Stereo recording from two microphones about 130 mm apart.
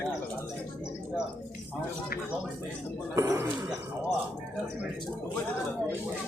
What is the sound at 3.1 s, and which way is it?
Speech, 20° right (ahead or behind).